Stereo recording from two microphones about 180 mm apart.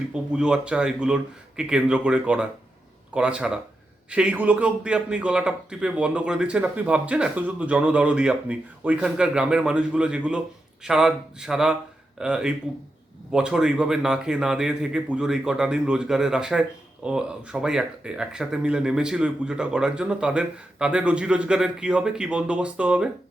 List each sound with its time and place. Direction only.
0.1 s a man's voice: 5° right (ahead or behind)